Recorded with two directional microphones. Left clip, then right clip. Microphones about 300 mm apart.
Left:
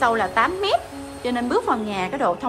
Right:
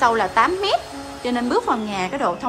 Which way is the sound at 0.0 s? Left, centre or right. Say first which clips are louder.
Right 2 dB; centre.